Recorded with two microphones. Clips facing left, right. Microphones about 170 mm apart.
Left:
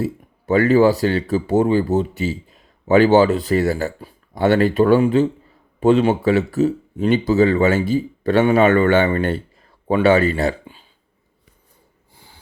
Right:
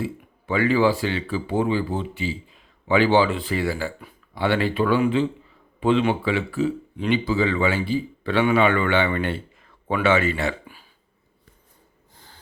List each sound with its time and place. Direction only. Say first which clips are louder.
0.0 s speech: left 5 dB; 40° left (ahead or behind)
12.1 s snort: left 2 dB; 10° left (ahead or behind)